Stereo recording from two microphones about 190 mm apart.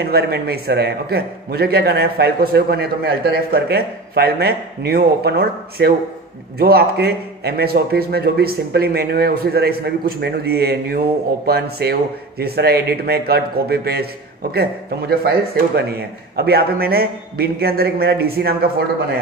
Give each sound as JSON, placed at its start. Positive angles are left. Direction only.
{"t": 0.0, "sound": "a man's voice", "side_deg": -55}